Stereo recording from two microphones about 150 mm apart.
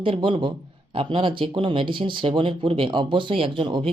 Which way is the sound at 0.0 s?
35° right (ahead or behind).